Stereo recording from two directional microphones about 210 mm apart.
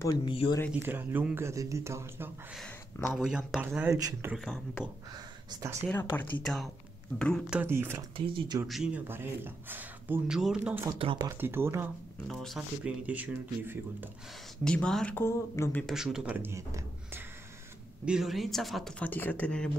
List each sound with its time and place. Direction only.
0.0 s speech: 20° left (ahead or behind)
0.7 s speech: 10° right (ahead or behind)
2.6 s speech: 10° left (ahead or behind)
3.2 s speech: 5° right (ahead or behind)
4.4 s speech: centre (ahead or behind)
5.1 s speech: 15° right (ahead or behind)
6.1 s speech: 5° left (ahead or behind); by 8.0 s 10° right (ahead or behind)
8.3 s speech: 20° right (ahead or behind)
8.6 s speech: centre (ahead or behind)
11.0 s speech: 25° right (ahead or behind)
11.2 s speech: 10° right (ahead or behind)
12.3 s speech: centre (ahead or behind)
14.6 s speech: 5° left (ahead or behind)
15.9 s speech: centre (ahead or behind)